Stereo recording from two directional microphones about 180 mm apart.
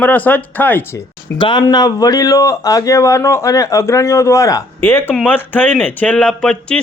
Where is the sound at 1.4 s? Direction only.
25° left (ahead or behind).